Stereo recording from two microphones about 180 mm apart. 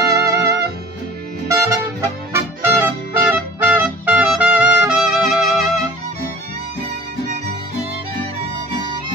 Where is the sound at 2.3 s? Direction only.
15° right (ahead or behind).